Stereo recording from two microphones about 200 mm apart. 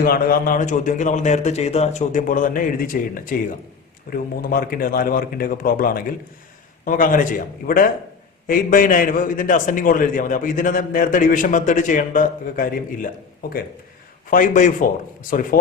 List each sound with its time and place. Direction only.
0.0 s a man's voice: 45° left (ahead or behind)
14.3 s a man's voice: 40° left (ahead or behind)